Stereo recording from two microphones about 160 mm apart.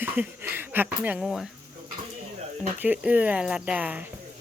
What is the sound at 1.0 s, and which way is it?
Speech, 5° right (ahead or behind).